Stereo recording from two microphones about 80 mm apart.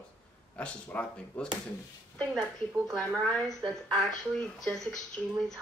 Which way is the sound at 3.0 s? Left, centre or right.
Centre.